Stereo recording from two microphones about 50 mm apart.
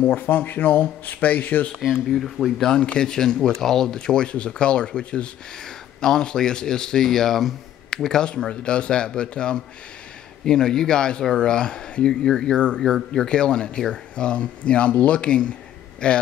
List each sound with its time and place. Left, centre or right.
0.1 s speech: left
1.8 s speech: centre
2.7 s speech: centre